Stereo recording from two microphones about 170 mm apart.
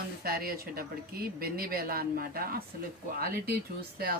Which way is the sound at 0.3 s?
60° right (ahead or behind).